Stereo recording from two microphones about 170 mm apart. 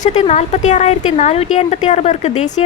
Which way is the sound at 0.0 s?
40° left (ahead or behind).